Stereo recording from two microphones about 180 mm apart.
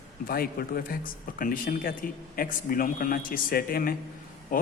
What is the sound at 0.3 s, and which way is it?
Speech, 55° left (ahead or behind).